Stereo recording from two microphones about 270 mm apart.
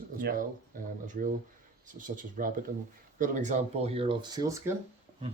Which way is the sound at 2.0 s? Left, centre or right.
Right.